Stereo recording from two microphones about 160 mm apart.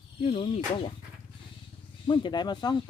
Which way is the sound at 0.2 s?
35° left (ahead or behind).